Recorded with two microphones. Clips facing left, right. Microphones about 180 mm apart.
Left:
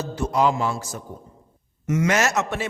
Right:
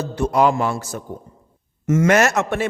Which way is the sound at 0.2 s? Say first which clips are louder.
Right 4 dB; 60° right (ahead or behind).